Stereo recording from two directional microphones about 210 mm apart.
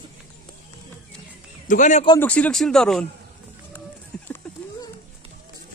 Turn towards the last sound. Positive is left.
turn(degrees=5)  # may be behind; listen again after turning